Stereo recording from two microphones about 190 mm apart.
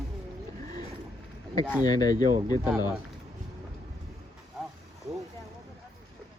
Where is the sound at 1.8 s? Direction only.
20° left (ahead or behind).